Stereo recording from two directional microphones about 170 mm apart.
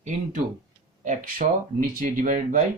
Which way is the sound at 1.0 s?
45° right (ahead or behind).